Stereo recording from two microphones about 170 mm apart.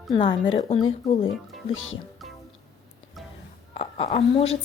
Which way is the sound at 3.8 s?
35° left (ahead or behind).